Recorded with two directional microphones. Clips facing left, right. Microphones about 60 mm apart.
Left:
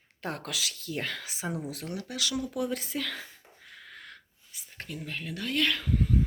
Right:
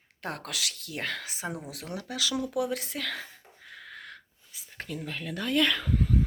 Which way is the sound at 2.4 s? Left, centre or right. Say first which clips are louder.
Right 2 dB; right.